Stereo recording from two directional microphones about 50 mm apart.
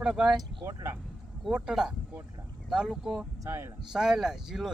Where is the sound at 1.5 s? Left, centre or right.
Centre.